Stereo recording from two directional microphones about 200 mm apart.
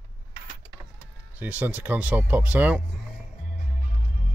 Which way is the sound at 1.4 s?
10° right (ahead or behind).